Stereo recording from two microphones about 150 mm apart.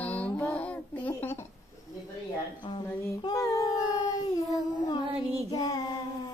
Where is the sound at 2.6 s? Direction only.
30° left (ahead or behind).